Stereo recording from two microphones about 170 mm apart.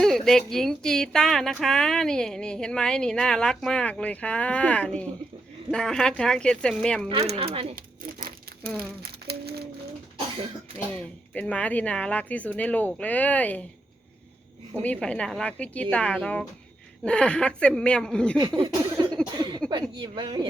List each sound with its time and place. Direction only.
0.0 s speech: centre (ahead or behind)
7.1 s speech: 35° right (ahead or behind)
9.2 s speech: 70° right (ahead or behind)
10.9 s speech: 5° left (ahead or behind)
14.7 s a woman's voice: 10° left (ahead or behind)
18.3 s a sound: 25° right (ahead or behind)